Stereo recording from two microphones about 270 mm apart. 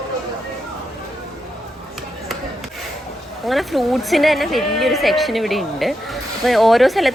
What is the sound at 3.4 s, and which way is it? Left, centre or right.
A woman's voice, centre.